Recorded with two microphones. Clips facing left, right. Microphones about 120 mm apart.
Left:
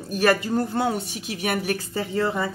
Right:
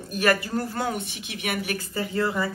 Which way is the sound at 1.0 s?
40° left (ahead or behind).